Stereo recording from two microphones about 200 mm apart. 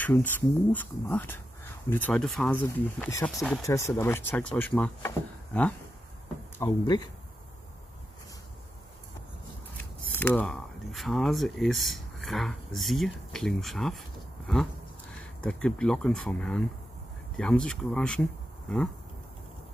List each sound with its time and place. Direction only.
0.0 s speech: 10° left (ahead or behind)
6.6 s speech: 20° left (ahead or behind)
10.1 s speech: 10° left (ahead or behind)